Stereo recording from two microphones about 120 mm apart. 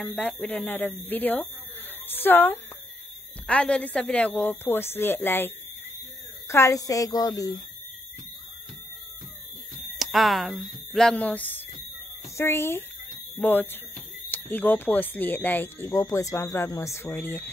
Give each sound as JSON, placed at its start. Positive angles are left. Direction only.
{"t": 0.2, "sound": "a woman's voice", "side_deg": 10}
{"t": 9.9, "sound": "a woman's voice", "side_deg": 0}